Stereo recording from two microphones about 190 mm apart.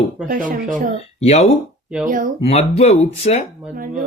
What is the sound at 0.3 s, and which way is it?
Speech, 45° right (ahead or behind).